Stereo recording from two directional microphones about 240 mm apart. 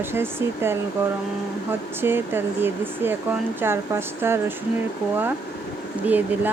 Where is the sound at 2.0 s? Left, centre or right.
Centre.